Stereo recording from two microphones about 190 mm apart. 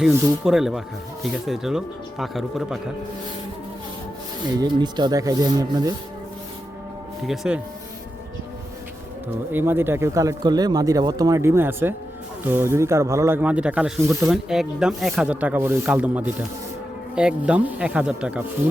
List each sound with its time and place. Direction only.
0.4 s speech: centre (ahead or behind)
4.5 s speech: 20° right (ahead or behind)
7.3 s speech: 5° right (ahead or behind)
9.5 s speech: 10° right (ahead or behind)